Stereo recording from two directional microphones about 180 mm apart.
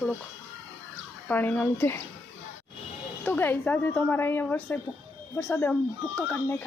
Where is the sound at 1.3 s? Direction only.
10° left (ahead or behind).